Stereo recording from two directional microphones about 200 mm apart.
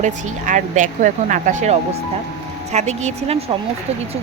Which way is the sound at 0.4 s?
40° right (ahead or behind).